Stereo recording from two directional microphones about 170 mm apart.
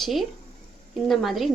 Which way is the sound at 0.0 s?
Centre (ahead or behind).